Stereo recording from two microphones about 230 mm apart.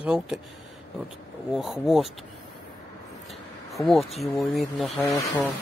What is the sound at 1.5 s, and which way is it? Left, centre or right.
Speech, centre.